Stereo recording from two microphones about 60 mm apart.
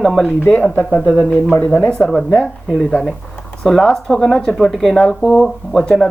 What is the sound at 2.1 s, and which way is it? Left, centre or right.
Speech, centre.